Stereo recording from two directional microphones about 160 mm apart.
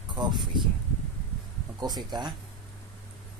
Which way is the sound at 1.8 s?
25° right (ahead or behind).